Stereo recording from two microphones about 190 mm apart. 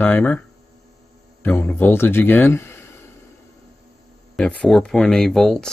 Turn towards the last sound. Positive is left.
turn(degrees=0)  # may be behind; listen again after turning